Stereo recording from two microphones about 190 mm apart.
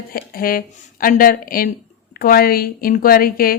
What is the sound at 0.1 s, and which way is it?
A woman's voice, 50° left (ahead or behind).